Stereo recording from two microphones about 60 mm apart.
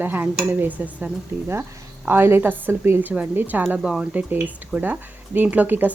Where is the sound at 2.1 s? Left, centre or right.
Right.